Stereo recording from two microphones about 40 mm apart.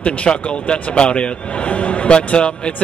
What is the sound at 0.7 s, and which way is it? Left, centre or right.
A man's voice, left.